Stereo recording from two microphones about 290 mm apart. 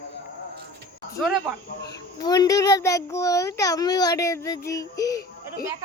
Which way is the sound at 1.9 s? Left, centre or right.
Centre.